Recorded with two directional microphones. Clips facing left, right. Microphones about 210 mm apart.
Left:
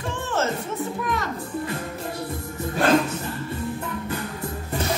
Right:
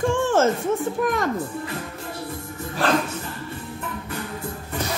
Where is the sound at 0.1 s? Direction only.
50° right (ahead or behind).